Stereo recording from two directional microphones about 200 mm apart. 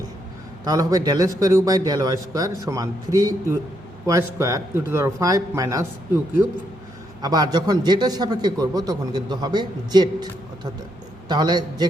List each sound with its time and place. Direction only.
0.6 s a man's voice: 20° right (ahead or behind)
7.2 s a man's voice: 20° right (ahead or behind)